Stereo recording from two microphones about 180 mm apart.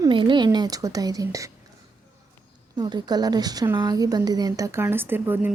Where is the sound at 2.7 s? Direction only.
25° right (ahead or behind).